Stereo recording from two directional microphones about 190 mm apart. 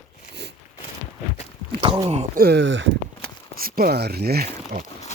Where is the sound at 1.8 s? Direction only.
30° right (ahead or behind).